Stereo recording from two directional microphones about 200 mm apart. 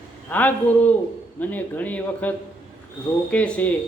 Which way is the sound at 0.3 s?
10° left (ahead or behind).